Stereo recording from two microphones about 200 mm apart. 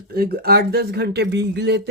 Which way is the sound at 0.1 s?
50° right (ahead or behind).